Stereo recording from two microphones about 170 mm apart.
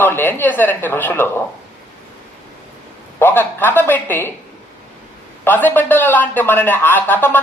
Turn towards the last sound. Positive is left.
turn(degrees=10)  # may be behind; listen again after turning